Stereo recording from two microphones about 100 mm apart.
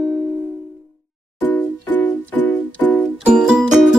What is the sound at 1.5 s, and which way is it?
Music, 20° left (ahead or behind).